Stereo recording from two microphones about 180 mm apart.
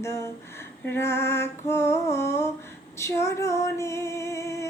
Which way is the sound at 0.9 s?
15° left (ahead or behind).